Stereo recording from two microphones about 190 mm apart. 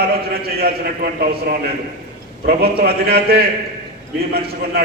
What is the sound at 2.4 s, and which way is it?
A man's voice, 55° right (ahead or behind).